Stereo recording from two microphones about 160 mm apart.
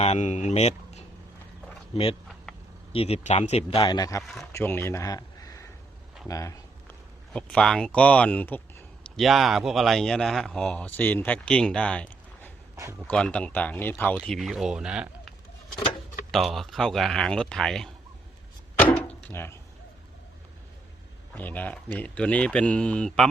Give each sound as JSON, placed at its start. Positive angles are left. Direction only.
{"t": 0.0, "sound": "speech", "side_deg": 45}
{"t": 2.9, "sound": "speech", "side_deg": 40}
{"t": 3.8, "sound": "a man's voice", "side_deg": 25}
{"t": 6.2, "sound": "a sound", "side_deg": 20}
{"t": 7.3, "sound": "speech", "side_deg": 5}
{"t": 12.7, "sound": "speech", "side_deg": -20}
{"t": 13.0, "sound": "speech", "side_deg": 5}
{"t": 14.3, "sound": "speech", "side_deg": 0}
{"t": 16.3, "sound": "speech", "side_deg": 0}
{"t": 18.8, "sound": "a sound", "side_deg": 10}
{"t": 21.3, "sound": "speech", "side_deg": 10}